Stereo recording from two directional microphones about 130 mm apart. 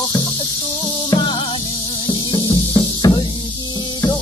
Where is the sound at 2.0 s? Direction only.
35° left (ahead or behind).